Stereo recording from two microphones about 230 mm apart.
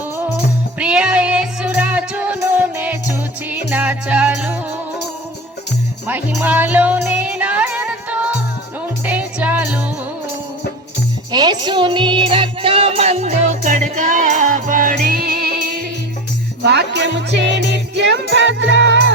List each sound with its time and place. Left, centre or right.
0.8 s music: centre
6.1 s music: centre
11.3 s music: centre; by 19.0 s right